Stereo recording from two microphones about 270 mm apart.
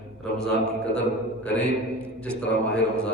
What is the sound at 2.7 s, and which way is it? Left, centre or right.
Speech, centre.